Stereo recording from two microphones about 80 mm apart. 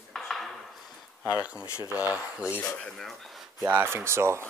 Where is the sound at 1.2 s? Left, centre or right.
Centre.